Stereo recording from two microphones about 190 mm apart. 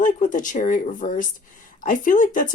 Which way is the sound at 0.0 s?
45° left (ahead or behind).